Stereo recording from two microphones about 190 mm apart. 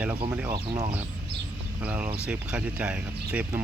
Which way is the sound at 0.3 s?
10° right (ahead or behind).